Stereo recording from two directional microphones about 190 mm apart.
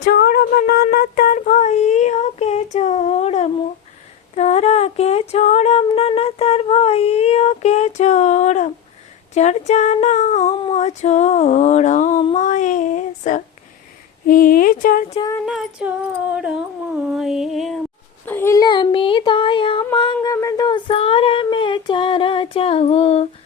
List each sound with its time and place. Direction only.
0.0 s a sound: 55° left (ahead or behind)
12.2 s female singing: 40° left (ahead or behind)
14.3 s speech: 50° left (ahead or behind)
15.4 s music: 5° right (ahead or behind)
18.3 s a sound: 10° left (ahead or behind)
20.2 s child singing: 15° left (ahead or behind); by 23.2 s 30° left (ahead or behind)